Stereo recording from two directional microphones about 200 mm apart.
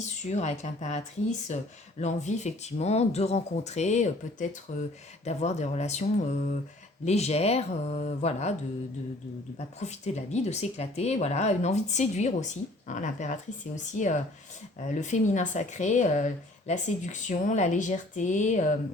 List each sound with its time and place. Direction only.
0.3 s speech: 35° left (ahead or behind)
10.3 s speech: 35° left (ahead or behind)